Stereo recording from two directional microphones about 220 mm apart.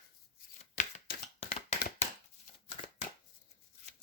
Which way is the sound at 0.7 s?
40° left (ahead or behind).